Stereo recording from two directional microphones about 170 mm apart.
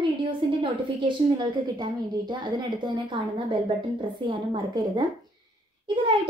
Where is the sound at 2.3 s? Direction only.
25° right (ahead or behind).